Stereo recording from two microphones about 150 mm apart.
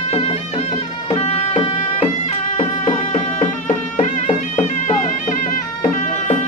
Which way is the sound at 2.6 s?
55° left (ahead or behind).